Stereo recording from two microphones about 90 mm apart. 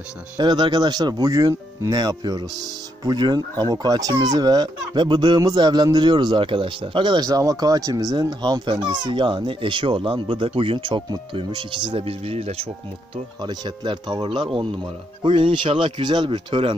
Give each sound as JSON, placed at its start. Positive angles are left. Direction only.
{"t": 0.4, "sound": "speech", "side_deg": -55}
{"t": 7.2, "sound": "speech", "side_deg": -40}
{"t": 9.0, "sound": "speech", "side_deg": -65}
{"t": 13.4, "sound": "speech", "side_deg": -55}